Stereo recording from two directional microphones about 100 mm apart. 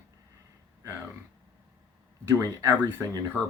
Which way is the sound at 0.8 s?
30° right (ahead or behind).